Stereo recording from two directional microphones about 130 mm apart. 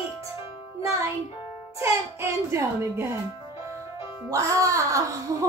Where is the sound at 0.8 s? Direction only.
20° right (ahead or behind).